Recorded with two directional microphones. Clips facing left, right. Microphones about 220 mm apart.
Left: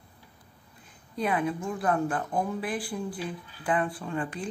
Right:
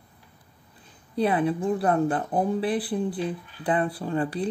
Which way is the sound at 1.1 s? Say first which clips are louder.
Right 5 dB; 30° right (ahead or behind).